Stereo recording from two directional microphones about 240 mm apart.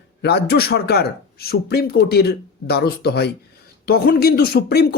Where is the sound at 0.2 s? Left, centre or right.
Left.